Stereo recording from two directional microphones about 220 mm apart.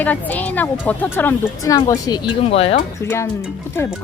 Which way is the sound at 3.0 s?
15° left (ahead or behind).